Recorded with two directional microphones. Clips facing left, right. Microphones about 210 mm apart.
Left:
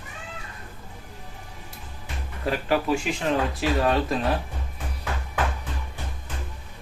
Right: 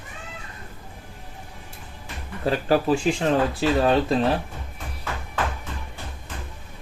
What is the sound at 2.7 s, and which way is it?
Speech, 35° right (ahead or behind).